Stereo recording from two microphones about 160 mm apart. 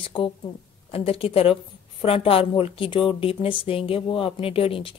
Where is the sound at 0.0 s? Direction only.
30° left (ahead or behind).